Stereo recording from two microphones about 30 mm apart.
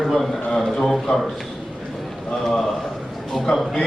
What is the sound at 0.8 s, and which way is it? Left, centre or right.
Speech, centre.